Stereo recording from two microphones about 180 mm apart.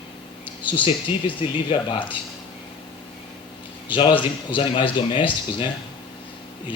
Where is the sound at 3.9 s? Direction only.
25° left (ahead or behind).